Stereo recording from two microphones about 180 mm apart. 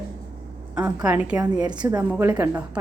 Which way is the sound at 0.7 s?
5° right (ahead or behind).